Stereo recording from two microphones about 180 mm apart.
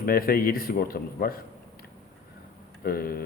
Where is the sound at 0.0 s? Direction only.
55° left (ahead or behind).